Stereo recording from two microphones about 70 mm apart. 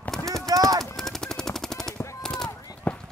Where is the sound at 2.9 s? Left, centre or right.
Left.